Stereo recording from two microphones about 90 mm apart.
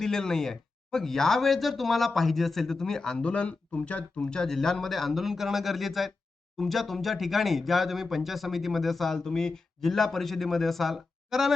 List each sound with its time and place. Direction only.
0.0 s speech: 5° left (ahead or behind)